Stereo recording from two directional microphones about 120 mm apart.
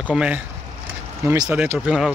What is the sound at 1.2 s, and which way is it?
Speech, 25° right (ahead or behind).